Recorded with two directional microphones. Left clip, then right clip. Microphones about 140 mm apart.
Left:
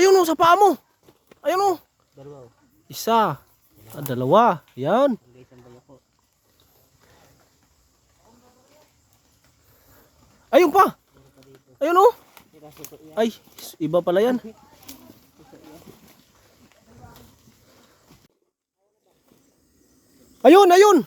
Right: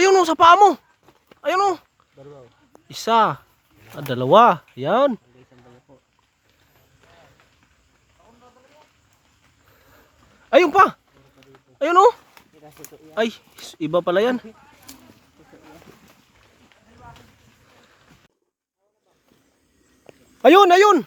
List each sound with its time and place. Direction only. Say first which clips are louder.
0.0 s a sound: right 2 dB; 5° left (ahead or behind)
1.4 s speech: right 1 dB; 15° left (ahead or behind)
2.1 s speech: left 1 dB; 5° right (ahead or behind)
2.8 s speech: right 2 dB; 15° left (ahead or behind)
3.9 s speech: right 3 dB; centre (ahead or behind)
5.9 s a sound: left 1 dB; 20° right (ahead or behind)
10.5 s speech: right 2 dB; 15° left (ahead or behind)
11.3 s a sound: right 1 dB; 15° left (ahead or behind)
12.6 s speech: left 1 dB; 10° left (ahead or behind)
20.4 s speech: even; 15° left (ahead or behind)